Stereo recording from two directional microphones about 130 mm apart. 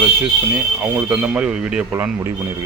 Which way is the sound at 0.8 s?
10° right (ahead or behind).